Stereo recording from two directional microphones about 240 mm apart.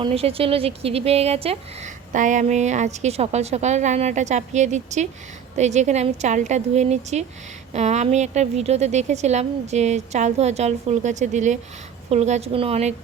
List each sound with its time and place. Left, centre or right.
0.0 s a woman's voice: right